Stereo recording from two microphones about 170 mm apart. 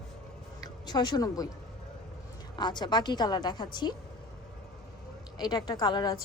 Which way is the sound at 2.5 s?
25° left (ahead or behind).